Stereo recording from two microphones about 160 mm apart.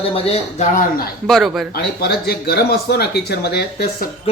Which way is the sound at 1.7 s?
85° left.